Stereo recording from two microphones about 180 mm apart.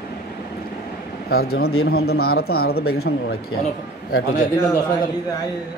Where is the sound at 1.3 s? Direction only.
60° left (ahead or behind).